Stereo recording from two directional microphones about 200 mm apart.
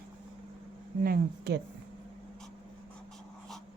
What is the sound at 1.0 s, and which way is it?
Speech, 50° right (ahead or behind).